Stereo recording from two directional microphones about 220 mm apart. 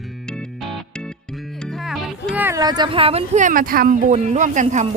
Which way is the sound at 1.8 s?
Centre (ahead or behind).